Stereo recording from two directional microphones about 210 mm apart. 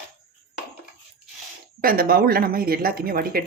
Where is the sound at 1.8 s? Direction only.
45° right (ahead or behind).